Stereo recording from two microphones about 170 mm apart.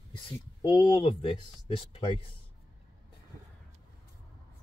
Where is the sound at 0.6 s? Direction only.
30° left (ahead or behind).